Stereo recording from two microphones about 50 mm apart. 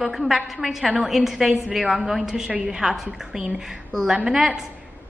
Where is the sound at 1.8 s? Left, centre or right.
Right; by 3.5 s centre.